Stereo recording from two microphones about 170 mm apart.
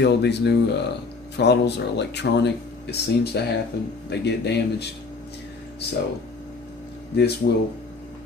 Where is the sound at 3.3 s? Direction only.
75° left (ahead or behind).